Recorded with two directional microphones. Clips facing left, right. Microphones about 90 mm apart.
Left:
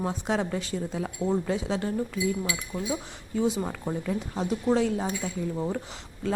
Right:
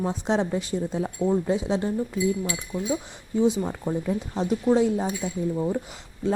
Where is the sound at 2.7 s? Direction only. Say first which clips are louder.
Right 4 dB; 25° left (ahead or behind).